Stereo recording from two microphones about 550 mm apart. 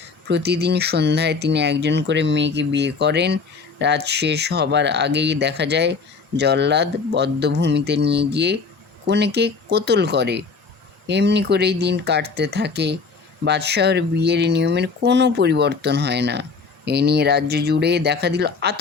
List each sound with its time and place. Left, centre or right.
0.3 s speech: centre